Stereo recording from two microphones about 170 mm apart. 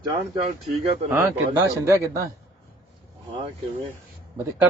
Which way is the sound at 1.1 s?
10° right (ahead or behind).